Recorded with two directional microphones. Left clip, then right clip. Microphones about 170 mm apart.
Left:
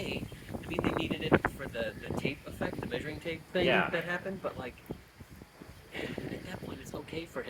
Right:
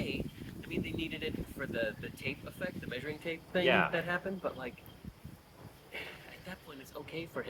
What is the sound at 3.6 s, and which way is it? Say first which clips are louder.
Speech: even; 20° left (ahead or behind).